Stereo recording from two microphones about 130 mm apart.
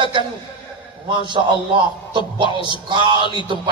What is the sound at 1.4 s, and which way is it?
A man's voice, 45° right (ahead or behind).